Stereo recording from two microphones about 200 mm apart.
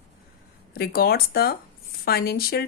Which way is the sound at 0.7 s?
50° left (ahead or behind).